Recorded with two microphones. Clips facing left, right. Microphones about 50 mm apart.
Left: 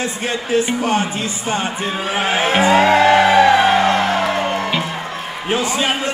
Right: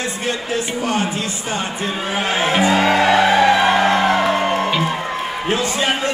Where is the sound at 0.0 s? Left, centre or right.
Left.